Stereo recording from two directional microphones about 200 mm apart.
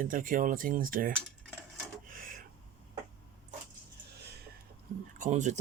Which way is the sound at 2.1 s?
45° right (ahead or behind).